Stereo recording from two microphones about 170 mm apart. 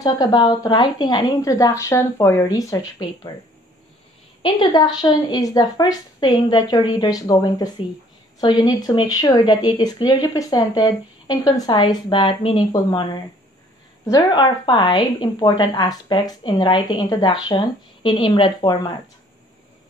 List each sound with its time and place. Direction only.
0.0 s speech: 20° left (ahead or behind)
4.4 s a woman's voice: 25° left (ahead or behind)